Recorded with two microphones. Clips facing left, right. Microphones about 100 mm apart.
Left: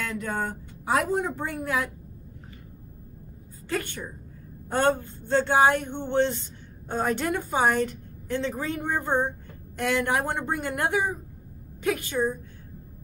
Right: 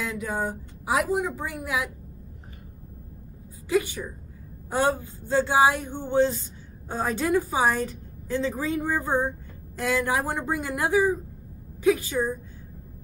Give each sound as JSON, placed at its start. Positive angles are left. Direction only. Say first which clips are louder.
{"t": 0.0, "sound": "a woman's voice", "louder": "right 1 dB", "side_deg": -10}
{"t": 3.6, "sound": "speech", "louder": "right 6 dB", "side_deg": -10}